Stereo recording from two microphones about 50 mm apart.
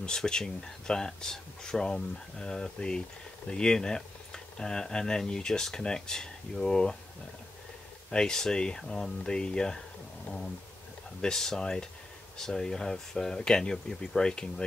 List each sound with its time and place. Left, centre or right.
0.0 s speech: centre
8.1 s speech: centre